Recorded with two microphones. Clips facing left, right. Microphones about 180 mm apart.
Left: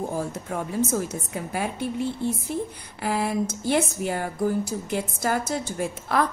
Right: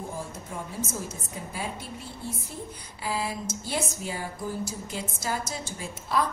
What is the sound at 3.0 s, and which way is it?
A woman's voice, 60° left (ahead or behind).